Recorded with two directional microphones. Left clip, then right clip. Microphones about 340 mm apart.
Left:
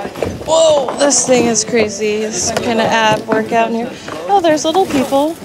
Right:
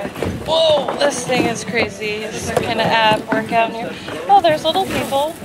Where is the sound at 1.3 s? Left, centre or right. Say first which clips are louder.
Left 6 dB; left.